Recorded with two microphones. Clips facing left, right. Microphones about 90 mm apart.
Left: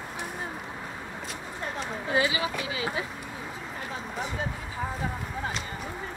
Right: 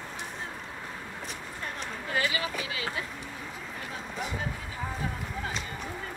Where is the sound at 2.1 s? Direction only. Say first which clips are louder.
Left 4 dB; 20° left (ahead or behind).